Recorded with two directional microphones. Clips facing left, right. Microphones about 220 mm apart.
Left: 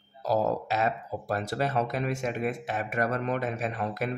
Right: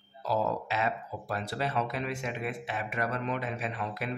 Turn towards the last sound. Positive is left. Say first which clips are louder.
# left 4 dB
turn(degrees=45)  # may be behind; listen again after turning